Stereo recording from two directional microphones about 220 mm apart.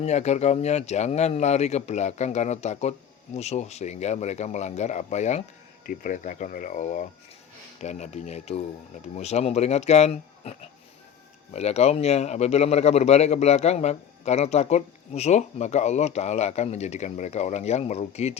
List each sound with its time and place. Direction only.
0.0 s a man's voice: 30° left (ahead or behind)